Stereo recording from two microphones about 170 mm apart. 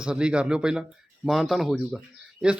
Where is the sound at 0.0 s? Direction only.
5° right (ahead or behind).